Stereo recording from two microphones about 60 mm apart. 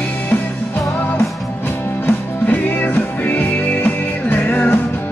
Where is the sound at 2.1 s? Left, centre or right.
Left.